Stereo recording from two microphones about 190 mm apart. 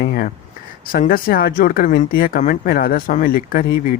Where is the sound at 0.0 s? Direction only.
50° left (ahead or behind).